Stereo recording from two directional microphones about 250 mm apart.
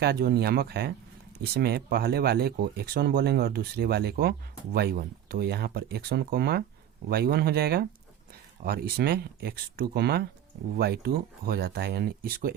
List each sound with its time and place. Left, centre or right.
0.0 s speech: right